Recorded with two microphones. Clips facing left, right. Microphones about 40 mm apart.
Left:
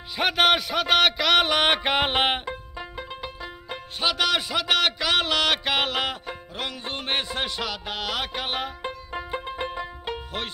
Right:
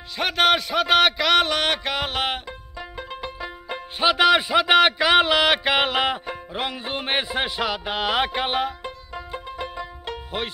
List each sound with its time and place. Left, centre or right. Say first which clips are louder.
0.2 s a man's voice: right 1 dB; centre
1.5 s music: left 2 dB; centre
2.8 s music: right 6 dB; centre
4.0 s a man's voice: right 7 dB; centre
6.8 s music: right 1 dB; centre
8.4 s music: right 5 dB; centre
8.8 s music: left 2 dB; left